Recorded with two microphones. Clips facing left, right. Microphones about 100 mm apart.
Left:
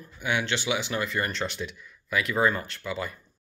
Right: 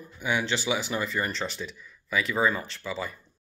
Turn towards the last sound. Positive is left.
turn(degrees=0)  # may be behind; listen again after turning